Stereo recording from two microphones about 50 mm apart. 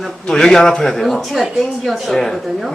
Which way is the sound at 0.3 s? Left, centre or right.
Centre.